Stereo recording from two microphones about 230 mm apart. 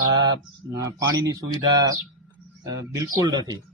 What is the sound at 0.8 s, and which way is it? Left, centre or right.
A man's voice, centre.